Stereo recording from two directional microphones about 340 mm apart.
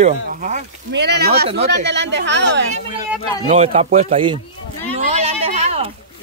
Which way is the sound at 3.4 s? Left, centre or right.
Centre.